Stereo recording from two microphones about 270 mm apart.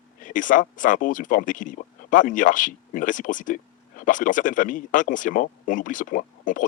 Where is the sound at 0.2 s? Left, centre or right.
Left.